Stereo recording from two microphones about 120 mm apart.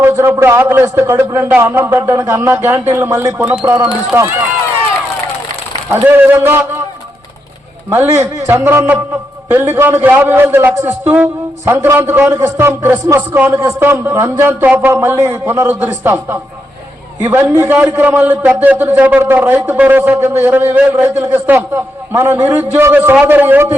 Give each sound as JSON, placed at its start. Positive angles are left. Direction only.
{"t": 0.0, "sound": "a man's voice", "side_deg": -20}
{"t": 5.9, "sound": "a man's voice", "side_deg": -15}
{"t": 7.9, "sound": "a man's voice", "side_deg": -25}
{"t": 17.7, "sound": "a man's voice", "side_deg": -10}